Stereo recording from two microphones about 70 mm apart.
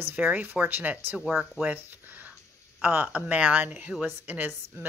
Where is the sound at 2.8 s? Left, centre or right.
Right.